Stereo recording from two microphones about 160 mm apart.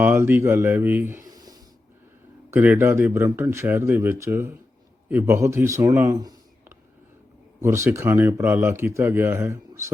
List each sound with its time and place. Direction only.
0.0 s a man's voice: 15° right (ahead or behind)
1.3 s snort: 25° right (ahead or behind)
2.5 s a man's voice: 15° right (ahead or behind)